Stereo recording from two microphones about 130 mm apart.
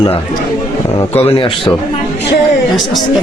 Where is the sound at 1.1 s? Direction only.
50° left (ahead or behind).